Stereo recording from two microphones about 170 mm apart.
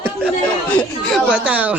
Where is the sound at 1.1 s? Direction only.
5° right (ahead or behind).